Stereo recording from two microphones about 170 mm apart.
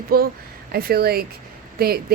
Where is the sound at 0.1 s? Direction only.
60° right (ahead or behind).